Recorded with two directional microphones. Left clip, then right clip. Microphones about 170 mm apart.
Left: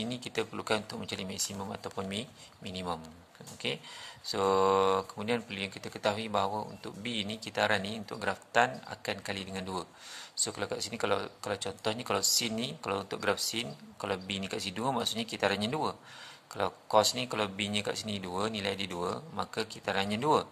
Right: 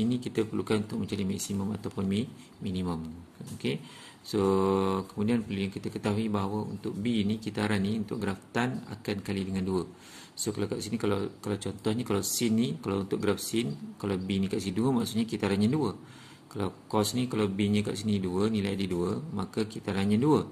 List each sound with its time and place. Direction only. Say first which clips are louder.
0.0 s speech: right 4 dB; 35° left (ahead or behind)